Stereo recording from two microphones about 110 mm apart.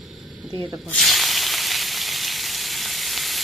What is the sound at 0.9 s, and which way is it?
Frying, centre (ahead or behind).